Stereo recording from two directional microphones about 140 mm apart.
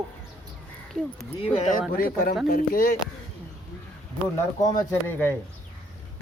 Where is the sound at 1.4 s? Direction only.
45° left (ahead or behind).